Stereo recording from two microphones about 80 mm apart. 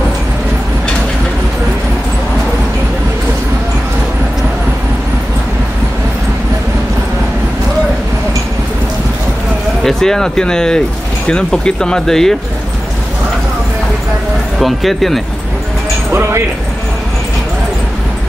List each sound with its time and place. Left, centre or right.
9.8 s speech: centre
14.6 s speech: centre
16.1 s speech: right